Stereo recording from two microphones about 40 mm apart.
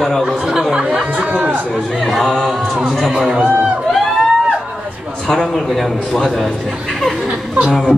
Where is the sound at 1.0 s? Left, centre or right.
Right.